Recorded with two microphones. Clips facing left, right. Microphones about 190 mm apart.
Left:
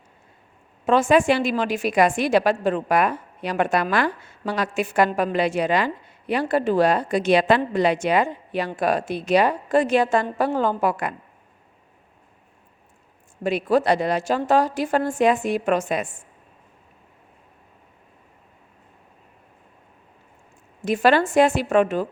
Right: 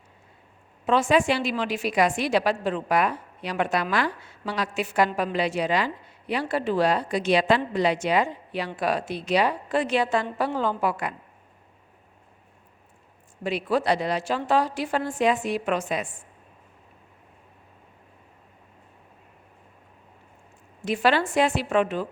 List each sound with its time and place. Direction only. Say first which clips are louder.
0.9 s a woman's voice: left 4 dB; 50° left (ahead or behind)
13.4 s a woman's voice: left 5 dB; 50° left (ahead or behind)
20.8 s a woman's voice: left 4 dB; 45° left (ahead or behind)